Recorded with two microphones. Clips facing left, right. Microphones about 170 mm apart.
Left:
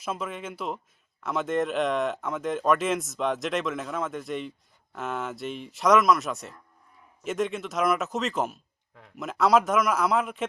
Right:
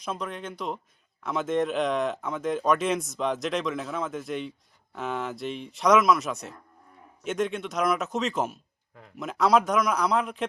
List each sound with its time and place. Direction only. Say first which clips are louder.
0.0 s speech: even; 5° left (ahead or behind)